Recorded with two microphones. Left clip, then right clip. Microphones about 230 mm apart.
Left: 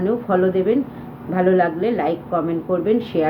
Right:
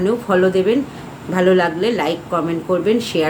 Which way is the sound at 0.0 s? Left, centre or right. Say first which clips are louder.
Right 3 dB; centre.